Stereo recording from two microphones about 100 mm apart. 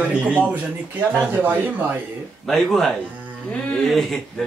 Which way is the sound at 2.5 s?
Centre (ahead or behind).